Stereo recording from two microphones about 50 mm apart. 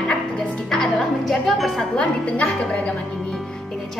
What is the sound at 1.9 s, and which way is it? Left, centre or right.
Speech, centre.